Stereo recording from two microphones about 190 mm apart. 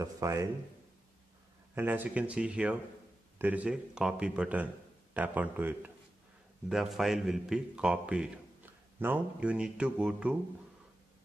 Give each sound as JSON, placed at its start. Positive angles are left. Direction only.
{"t": 0.0, "sound": "speech", "side_deg": -15}
{"t": 1.8, "sound": "a man's voice", "side_deg": -10}